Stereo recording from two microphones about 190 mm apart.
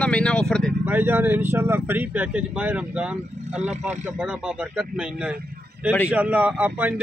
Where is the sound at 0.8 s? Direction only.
10° right (ahead or behind).